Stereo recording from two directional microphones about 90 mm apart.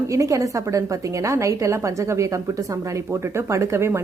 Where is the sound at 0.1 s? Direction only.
35° right (ahead or behind).